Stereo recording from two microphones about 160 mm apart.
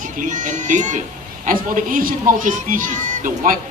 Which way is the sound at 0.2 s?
50° right (ahead or behind).